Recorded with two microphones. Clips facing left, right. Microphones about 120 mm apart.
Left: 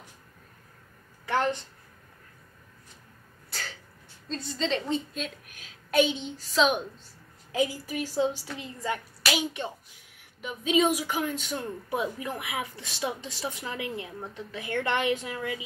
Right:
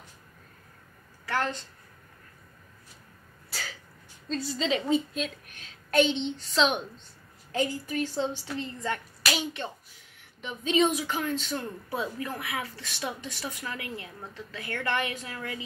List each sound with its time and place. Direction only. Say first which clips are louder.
1.2 s a woman's voice: left 3 dB; 20° left (ahead or behind)
3.4 s a sound: even; 5° right (ahead or behind)
4.3 s a woman's voice: right 1 dB; 5° right (ahead or behind); by 15.6 s 20° left (ahead or behind)